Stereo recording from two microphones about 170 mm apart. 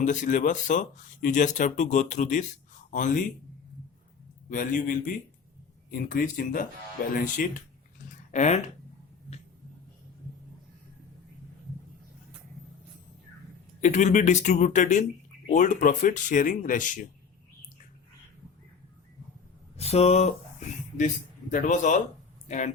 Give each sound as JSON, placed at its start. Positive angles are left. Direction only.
{"t": 0.0, "sound": "speech", "side_deg": 50}
{"t": 4.4, "sound": "speech", "side_deg": 50}
{"t": 8.3, "sound": "speech", "side_deg": 40}
{"t": 13.8, "sound": "speech", "side_deg": 45}
{"t": 19.7, "sound": "speech", "side_deg": 35}
{"t": 21.5, "sound": "speech", "side_deg": 50}